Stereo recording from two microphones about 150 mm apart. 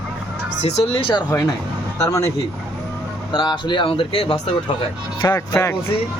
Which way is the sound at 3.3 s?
30° left (ahead or behind).